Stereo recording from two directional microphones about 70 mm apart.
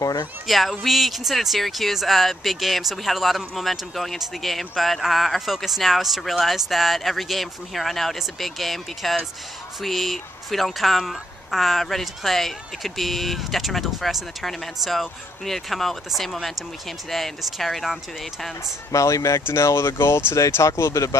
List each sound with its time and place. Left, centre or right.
0.0 s speech: left
0.5 s speech: centre
18.9 s speech: left